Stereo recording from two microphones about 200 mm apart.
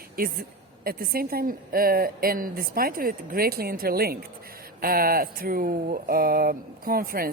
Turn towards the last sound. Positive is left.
turn(degrees=-45)  # may be behind; listen again after turning